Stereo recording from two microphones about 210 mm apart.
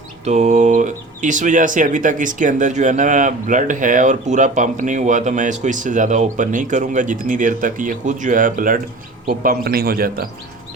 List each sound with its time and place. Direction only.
0.3 s a man's voice: 35° right (ahead or behind)